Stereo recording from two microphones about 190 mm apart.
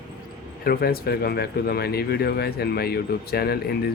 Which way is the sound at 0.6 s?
55° left (ahead or behind).